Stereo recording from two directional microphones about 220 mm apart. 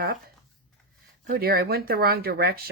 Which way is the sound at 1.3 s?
45° right (ahead or behind).